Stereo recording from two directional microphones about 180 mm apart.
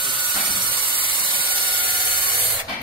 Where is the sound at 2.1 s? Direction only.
25° right (ahead or behind).